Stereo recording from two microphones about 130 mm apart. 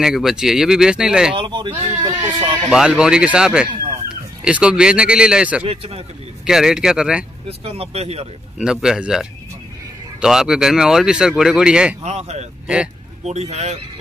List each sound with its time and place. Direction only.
0.0 s speech: 5° right (ahead or behind)
1.3 s speech: 40° right (ahead or behind)
2.7 s speech: 5° right (ahead or behind)
5.6 s speech: 45° right (ahead or behind)
6.4 s speech: 5° right (ahead or behind)
7.4 s speech: 50° right (ahead or behind)
8.5 s speech: 5° right (ahead or behind)
12.0 s speech: 60° right (ahead or behind)
12.6 s speech: 10° right (ahead or behind)
13.2 s speech: 60° right (ahead or behind)